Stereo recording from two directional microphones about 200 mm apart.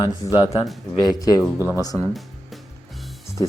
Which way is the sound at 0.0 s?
20° left (ahead or behind).